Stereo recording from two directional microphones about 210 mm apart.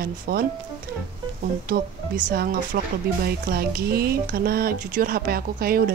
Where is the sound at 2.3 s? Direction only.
45° right (ahead or behind).